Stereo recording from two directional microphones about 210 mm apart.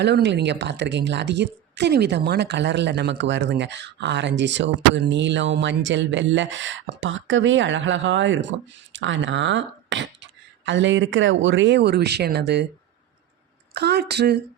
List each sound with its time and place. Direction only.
0.0 s a woman's voice: 55° right (ahead or behind)
13.7 s speech: 50° right (ahead or behind)